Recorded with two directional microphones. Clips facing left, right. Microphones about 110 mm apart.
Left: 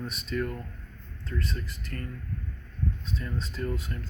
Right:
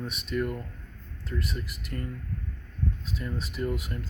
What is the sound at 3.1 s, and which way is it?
Speech, 10° right (ahead or behind).